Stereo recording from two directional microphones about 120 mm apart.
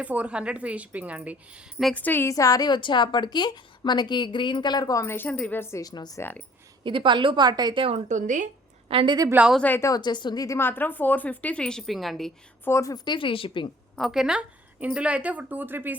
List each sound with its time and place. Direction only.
0.0 s a woman's voice: 10° right (ahead or behind)
1.8 s speech: 10° left (ahead or behind)
2.3 s a woman's voice: 30° left (ahead or behind)
5.9 s a woman's voice: 35° left (ahead or behind)
6.8 s a woman's voice: 45° right (ahead or behind)
8.0 s speech: 90° right
8.9 s a woman's voice: 50° right (ahead or behind)
9.6 s speech: 15° left (ahead or behind)
9.9 s speech: 40° left (ahead or behind); by 12.3 s centre (ahead or behind)
12.6 s speech: 25° left (ahead or behind)
13.1 s a woman's voice: 45° left (ahead or behind)
13.9 s a woman's voice: centre (ahead or behind); by 16.0 s 15° right (ahead or behind)